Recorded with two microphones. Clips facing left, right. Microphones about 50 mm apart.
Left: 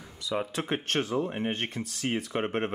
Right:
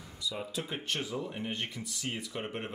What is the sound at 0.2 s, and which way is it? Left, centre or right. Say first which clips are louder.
Speech: left 6 dB; left.